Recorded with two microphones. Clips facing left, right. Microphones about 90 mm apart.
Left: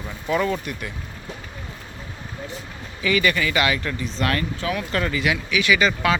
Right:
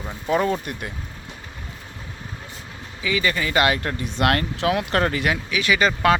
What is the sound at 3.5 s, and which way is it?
Speech, 45° right (ahead or behind).